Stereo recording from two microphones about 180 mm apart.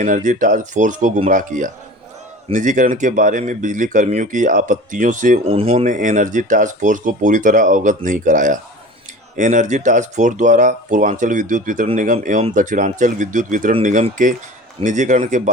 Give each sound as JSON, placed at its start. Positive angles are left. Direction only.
{"t": 0.0, "sound": "speech", "side_deg": -45}